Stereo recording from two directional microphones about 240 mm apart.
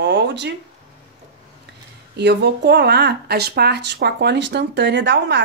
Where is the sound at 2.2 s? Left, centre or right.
Right.